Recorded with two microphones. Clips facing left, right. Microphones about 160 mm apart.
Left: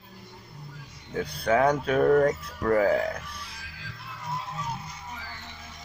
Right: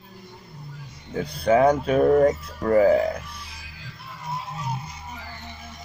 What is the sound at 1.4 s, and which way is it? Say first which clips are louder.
Speech: right 5 dB; 20° right (ahead or behind).